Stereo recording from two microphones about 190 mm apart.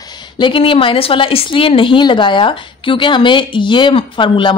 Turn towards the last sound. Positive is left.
turn(degrees=25)  # may be behind; listen again after turning